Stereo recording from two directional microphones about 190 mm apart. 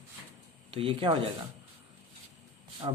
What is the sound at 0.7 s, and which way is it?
Speech, 25° right (ahead or behind).